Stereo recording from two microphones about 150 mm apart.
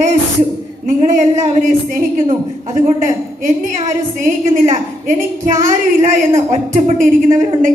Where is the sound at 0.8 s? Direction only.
50° right (ahead or behind).